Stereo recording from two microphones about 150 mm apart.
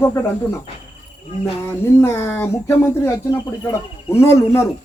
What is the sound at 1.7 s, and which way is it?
Speech, 15° left (ahead or behind).